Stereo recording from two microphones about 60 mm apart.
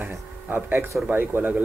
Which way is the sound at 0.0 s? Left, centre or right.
Right.